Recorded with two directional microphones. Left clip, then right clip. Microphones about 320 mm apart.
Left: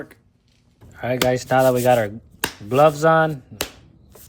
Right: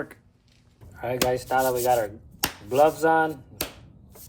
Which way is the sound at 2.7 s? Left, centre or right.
Left.